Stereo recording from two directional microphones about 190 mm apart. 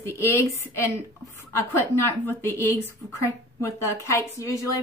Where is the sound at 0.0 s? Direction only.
15° left (ahead or behind).